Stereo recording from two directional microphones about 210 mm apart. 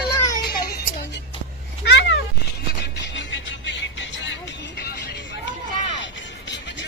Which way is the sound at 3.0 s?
60° left (ahead or behind).